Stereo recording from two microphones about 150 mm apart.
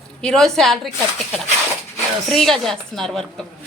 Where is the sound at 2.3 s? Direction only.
Centre (ahead or behind).